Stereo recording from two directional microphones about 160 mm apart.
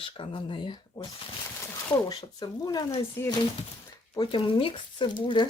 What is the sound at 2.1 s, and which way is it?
Speech, 25° left (ahead or behind).